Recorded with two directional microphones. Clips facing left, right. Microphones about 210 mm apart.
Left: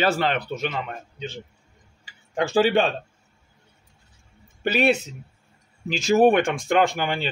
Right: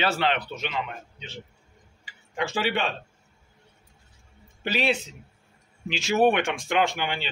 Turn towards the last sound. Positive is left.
turn(degrees=45)  # may be behind; listen again after turning